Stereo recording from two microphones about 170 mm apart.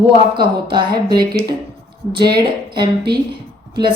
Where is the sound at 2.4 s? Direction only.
25° right (ahead or behind).